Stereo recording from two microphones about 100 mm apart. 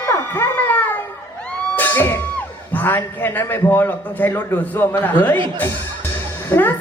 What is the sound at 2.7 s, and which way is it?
A man's voice, 20° left (ahead or behind).